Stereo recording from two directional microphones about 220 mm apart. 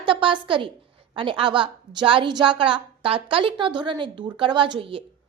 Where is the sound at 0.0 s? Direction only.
25° right (ahead or behind).